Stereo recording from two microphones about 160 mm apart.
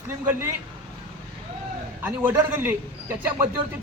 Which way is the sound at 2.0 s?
15° right (ahead or behind).